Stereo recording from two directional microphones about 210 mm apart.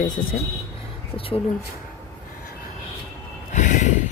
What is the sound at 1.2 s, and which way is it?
Speech, 25° left (ahead or behind).